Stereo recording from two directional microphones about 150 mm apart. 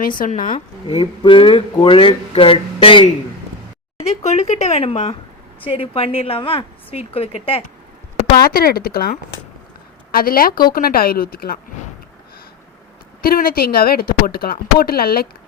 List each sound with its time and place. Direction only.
0.5 s speech: 35° left (ahead or behind)
4.0 s speech: 45° left (ahead or behind)
8.4 s speech: 80° left
10.1 s speech: 80° left
13.2 s speech: 80° left